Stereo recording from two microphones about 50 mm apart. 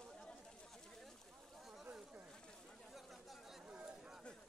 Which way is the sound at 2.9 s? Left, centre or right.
Centre.